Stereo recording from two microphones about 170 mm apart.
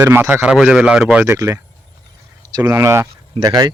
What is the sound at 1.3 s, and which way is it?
Speech, 20° right (ahead or behind).